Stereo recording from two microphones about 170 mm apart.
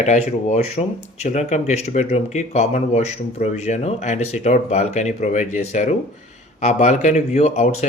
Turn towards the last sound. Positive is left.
turn(degrees=40)  # may be behind; listen again after turning